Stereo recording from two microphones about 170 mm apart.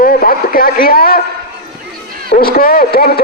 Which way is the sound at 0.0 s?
60° left (ahead or behind).